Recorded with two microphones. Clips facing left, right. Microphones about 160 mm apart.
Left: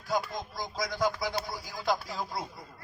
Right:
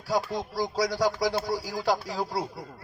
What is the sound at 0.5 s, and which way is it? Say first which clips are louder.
A man's voice: right 9 dB; 40° right (ahead or behind).